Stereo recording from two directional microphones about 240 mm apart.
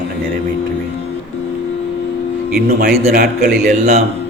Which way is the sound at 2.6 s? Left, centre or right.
Right.